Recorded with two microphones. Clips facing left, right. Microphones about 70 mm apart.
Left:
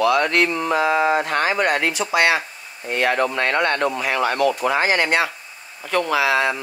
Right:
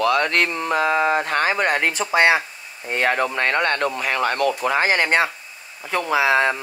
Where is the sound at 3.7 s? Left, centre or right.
Left.